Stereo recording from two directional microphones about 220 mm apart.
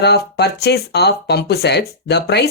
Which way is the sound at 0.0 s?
50° left (ahead or behind).